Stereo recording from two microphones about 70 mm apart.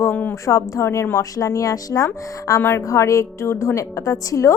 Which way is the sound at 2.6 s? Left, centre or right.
Left.